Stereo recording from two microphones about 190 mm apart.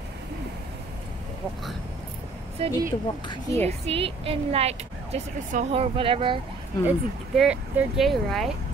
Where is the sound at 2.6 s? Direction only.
30° right (ahead or behind).